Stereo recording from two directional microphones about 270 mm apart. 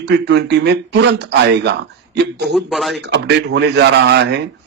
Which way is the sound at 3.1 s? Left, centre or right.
Right.